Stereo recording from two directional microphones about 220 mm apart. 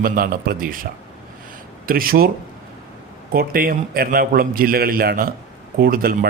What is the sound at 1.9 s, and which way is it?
Speech, 40° right (ahead or behind).